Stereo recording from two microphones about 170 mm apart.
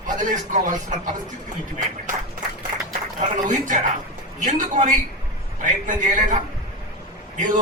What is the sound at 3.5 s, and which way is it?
Speech, 50° right (ahead or behind).